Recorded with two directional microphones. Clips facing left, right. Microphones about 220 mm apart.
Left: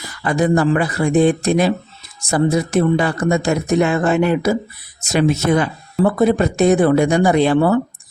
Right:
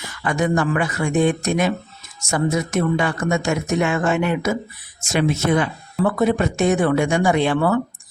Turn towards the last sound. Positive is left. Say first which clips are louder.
# left 4 dB
turn(degrees=35)  # may be behind; listen again after turning